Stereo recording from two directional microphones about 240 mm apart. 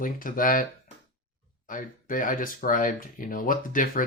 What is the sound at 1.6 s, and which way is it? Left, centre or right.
Speech, left.